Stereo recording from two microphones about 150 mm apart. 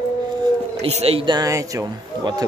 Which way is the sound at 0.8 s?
45° right (ahead or behind).